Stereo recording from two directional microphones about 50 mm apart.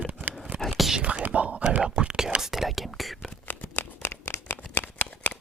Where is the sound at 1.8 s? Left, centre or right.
Centre.